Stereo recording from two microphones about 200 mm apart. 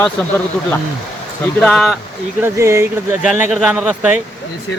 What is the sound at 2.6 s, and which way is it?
Speech, 15° right (ahead or behind).